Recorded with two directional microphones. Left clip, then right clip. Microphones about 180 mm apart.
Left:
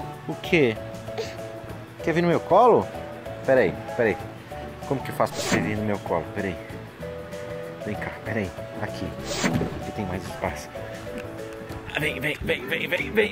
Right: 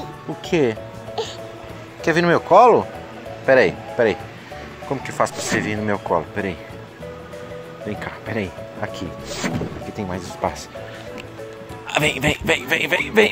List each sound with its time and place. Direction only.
0.3 s music: centre (ahead or behind)
2.0 s speech: 10° right (ahead or behind)
3.4 s speech: 15° right (ahead or behind)
4.8 s speech: centre (ahead or behind)
5.6 s speech: 15° right (ahead or behind)
7.9 s speech: 20° right (ahead or behind)
9.3 s speech: centre (ahead or behind)
9.9 s speech: 25° right (ahead or behind)
11.9 s a man's voice: 40° right (ahead or behind)